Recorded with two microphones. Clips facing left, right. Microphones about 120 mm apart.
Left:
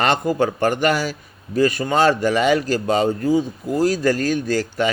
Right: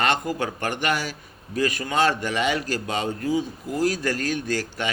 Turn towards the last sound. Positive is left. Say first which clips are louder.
# left 7 dB
turn(degrees=35)  # may be behind; listen again after turning